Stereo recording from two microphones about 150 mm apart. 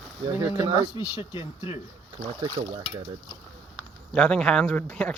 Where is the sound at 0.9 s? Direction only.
30° left (ahead or behind).